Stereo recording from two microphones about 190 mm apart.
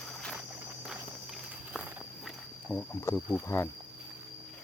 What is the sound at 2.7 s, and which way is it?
Speech, 15° left (ahead or behind).